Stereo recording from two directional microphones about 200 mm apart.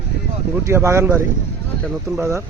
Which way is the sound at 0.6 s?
15° right (ahead or behind).